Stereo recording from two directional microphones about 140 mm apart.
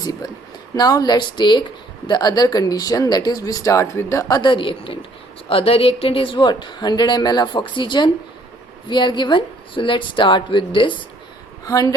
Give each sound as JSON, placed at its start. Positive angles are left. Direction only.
{"t": 0.0, "sound": "a woman's voice", "side_deg": 25}
{"t": 11.6, "sound": "speech", "side_deg": 25}